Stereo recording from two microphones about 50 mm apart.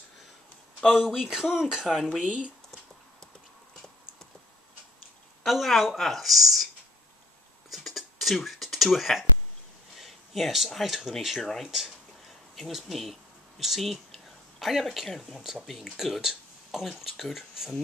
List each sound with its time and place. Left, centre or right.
1.0 s speech: centre
2.0 s speech: centre
5.4 s speech: centre
7.7 s a sound: centre
9.9 s speech: centre